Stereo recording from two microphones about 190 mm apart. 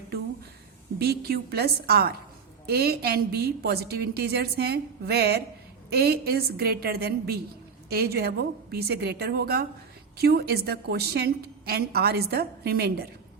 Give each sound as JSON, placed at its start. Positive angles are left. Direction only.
{"t": 0.9, "sound": "a woman's voice", "side_deg": -55}